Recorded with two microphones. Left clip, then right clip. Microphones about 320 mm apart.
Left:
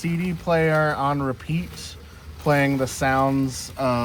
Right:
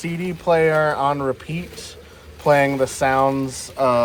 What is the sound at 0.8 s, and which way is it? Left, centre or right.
Speech, right.